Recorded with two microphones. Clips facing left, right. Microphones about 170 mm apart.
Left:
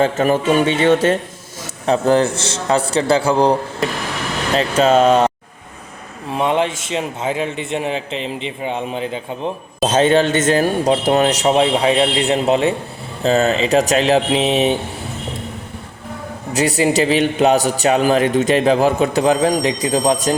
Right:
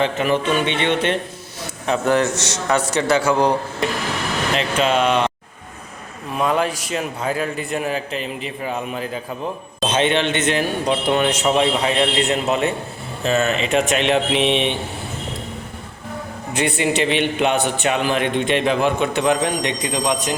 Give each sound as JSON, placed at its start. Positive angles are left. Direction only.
{"t": 0.0, "sound": "speech", "side_deg": 45}
{"t": 1.9, "sound": "a man's voice", "side_deg": 30}
{"t": 6.3, "sound": "a man's voice", "side_deg": 25}
{"t": 9.8, "sound": "a man's voice", "side_deg": 40}
{"t": 16.5, "sound": "a man's voice", "side_deg": 40}